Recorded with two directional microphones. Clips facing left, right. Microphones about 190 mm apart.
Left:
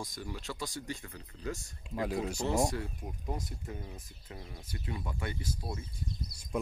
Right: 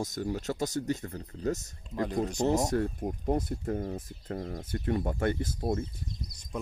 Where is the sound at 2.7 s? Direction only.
50° right (ahead or behind).